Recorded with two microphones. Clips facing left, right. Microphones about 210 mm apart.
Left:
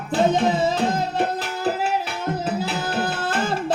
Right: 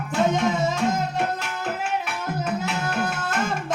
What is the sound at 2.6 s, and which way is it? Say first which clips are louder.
Tabla: left 2 dB; 30° left (ahead or behind).